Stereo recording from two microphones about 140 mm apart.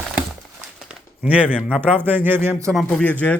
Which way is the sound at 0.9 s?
10° right (ahead or behind).